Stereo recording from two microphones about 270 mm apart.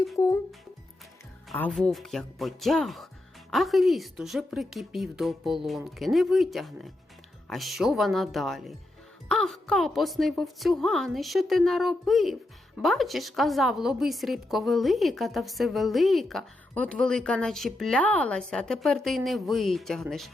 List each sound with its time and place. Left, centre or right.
1.5 s a woman's voice: centre